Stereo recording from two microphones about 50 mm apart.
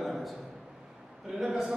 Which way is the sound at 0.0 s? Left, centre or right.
Centre.